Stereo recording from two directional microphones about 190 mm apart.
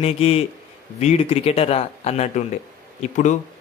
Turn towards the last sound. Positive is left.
turn(degrees=40)  # may be behind; listen again after turning